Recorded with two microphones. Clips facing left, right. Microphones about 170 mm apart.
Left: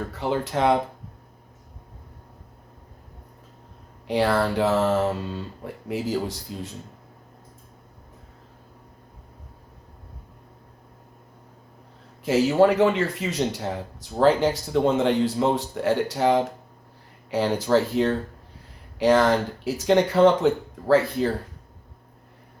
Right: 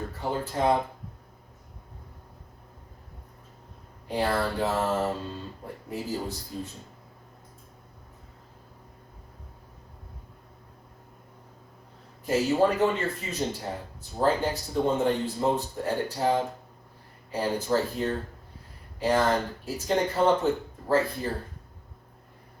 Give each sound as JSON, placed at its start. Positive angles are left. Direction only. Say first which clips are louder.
{"t": 0.1, "sound": "speech", "louder": "left 5 dB", "side_deg": 90}
{"t": 4.0, "sound": "speech", "louder": "left 5 dB", "side_deg": 85}
{"t": 12.2, "sound": "speech", "louder": "left 5 dB", "side_deg": 90}